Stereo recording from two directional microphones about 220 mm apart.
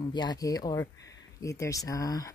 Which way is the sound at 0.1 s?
20° left (ahead or behind).